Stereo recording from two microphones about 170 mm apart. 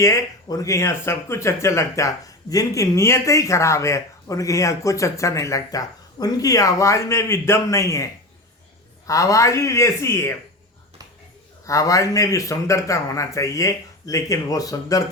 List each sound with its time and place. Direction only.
0.0 s speech: 20° left (ahead or behind)
11.6 s a man's voice: 20° left (ahead or behind)